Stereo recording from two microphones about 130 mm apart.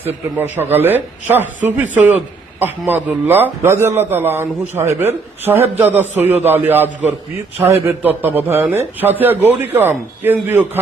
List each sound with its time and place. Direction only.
0.0 s a man's voice: 15° right (ahead or behind)